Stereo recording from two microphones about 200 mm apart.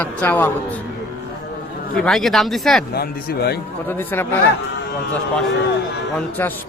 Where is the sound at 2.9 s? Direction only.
50° left (ahead or behind).